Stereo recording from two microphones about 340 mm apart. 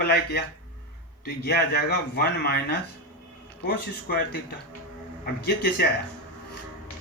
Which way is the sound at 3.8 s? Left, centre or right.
Left.